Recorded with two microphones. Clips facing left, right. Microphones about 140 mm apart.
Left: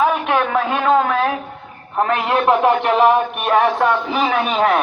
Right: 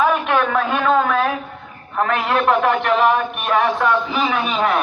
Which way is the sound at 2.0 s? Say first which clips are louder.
Left 1 dB; 25° left (ahead or behind).